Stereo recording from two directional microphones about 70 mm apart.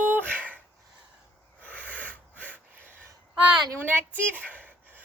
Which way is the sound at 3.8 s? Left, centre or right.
Right.